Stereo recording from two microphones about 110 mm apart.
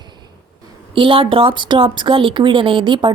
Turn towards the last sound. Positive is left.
turn(degrees=-45)  # may be behind; listen again after turning